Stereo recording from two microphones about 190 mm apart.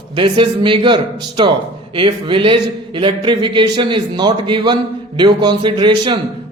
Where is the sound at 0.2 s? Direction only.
25° right (ahead or behind).